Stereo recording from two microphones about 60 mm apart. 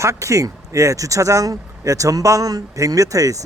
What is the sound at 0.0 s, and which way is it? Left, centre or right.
Speech, right.